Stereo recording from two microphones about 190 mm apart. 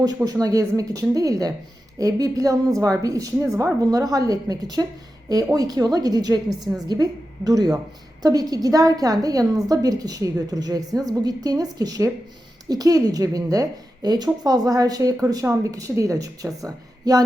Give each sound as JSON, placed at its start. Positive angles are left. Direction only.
{"t": 0.0, "sound": "a woman's voice", "side_deg": -20}